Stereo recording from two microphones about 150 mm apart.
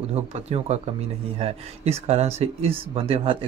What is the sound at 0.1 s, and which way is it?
Speech, 45° right (ahead or behind).